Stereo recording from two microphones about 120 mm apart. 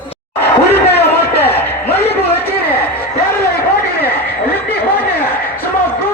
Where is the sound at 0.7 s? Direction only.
20° left (ahead or behind).